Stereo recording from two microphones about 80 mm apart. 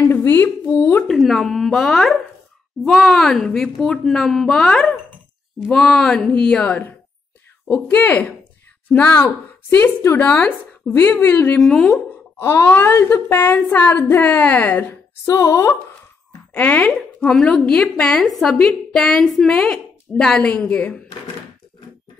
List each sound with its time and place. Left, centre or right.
0.1 s speech: left
1.0 s a woman's voice: centre
7.6 s speech: centre
11.5 s speech: centre
11.9 s speech: left
15.2 s speech: left
16.5 s a woman's voice: centre